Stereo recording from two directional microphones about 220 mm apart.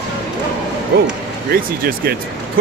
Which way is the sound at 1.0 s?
45° right (ahead or behind).